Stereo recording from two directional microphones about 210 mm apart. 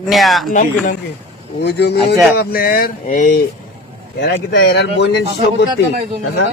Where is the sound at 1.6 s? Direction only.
50° left (ahead or behind).